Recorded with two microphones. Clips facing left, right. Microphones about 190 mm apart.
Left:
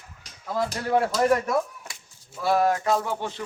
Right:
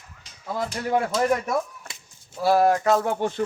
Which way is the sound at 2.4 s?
35° right (ahead or behind).